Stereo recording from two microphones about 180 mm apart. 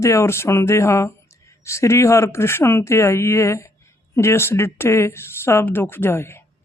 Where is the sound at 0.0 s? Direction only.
15° left (ahead or behind).